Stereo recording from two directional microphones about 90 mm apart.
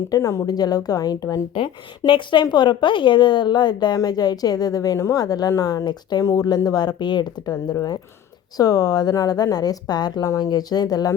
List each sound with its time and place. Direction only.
0.1 s a woman's voice: 35° left (ahead or behind)
1.5 s a woman's voice: 70° left (ahead or behind); by 6.2 s 55° left (ahead or behind)
6.2 s a woman's voice: 40° left (ahead or behind)
7.5 s a woman's voice: 40° left (ahead or behind)